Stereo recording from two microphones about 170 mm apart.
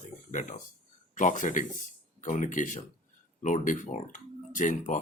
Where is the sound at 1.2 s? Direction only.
50° left (ahead or behind).